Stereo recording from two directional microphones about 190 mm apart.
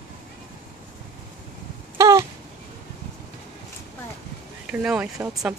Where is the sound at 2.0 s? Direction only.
15° right (ahead or behind).